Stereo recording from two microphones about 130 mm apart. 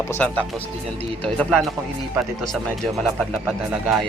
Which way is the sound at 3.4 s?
5° right (ahead or behind).